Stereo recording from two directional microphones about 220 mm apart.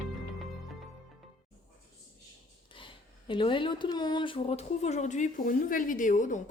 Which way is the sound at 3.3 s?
25° left (ahead or behind).